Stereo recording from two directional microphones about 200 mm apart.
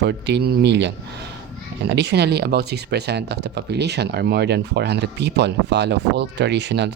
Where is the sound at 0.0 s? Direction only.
60° right (ahead or behind).